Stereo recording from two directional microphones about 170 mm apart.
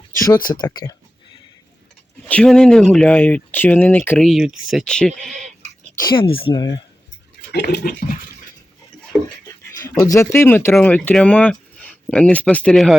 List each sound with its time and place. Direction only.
0.1 s speech: 20° left (ahead or behind)
2.2 s speech: 5° left (ahead or behind)
4.3 s speech: centre (ahead or behind)
6.0 s speech: 25° left (ahead or behind)
7.5 s toothbrush: 75° left (ahead or behind)
9.1 s speech: 5° left (ahead or behind)
10.0 s speech: 20° left (ahead or behind); by 13.0 s centre (ahead or behind)